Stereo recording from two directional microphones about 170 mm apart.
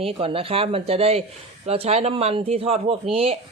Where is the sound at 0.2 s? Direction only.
30° right (ahead or behind).